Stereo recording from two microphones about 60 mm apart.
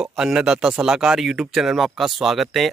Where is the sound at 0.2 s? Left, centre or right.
Centre.